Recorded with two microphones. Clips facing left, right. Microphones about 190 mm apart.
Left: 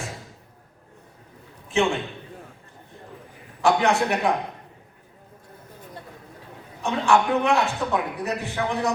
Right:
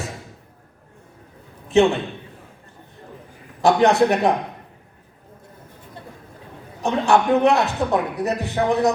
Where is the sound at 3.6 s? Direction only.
35° right (ahead or behind).